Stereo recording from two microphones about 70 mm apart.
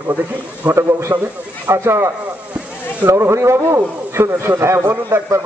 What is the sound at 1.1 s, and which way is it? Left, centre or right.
Speech, right.